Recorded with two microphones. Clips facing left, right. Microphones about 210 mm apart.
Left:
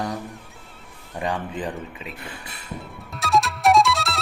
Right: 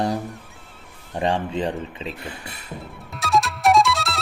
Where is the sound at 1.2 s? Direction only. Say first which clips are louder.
Right 4 dB; 25° right (ahead or behind).